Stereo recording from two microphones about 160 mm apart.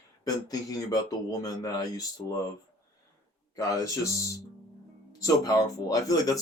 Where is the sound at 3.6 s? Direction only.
20° left (ahead or behind).